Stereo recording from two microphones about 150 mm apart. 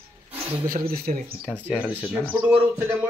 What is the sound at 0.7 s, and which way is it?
Speech, 80° right.